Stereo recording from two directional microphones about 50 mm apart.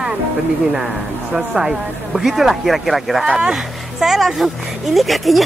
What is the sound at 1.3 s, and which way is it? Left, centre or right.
Speech, centre.